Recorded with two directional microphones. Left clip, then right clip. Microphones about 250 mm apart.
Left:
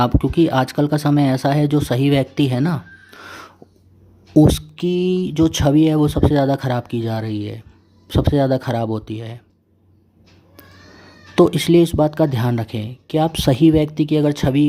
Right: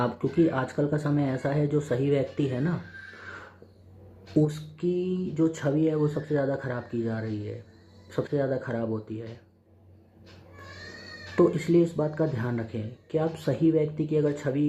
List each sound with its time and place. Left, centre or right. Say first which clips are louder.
0.0 s speech: left 8 dB; left
4.7 s speech: left 9 dB; left
11.3 s speech: left 9 dB; left